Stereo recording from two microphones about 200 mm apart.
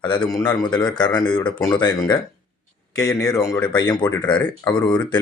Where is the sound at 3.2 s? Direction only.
15° left (ahead or behind).